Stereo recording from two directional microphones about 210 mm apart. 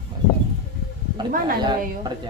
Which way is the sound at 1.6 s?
20° right (ahead or behind).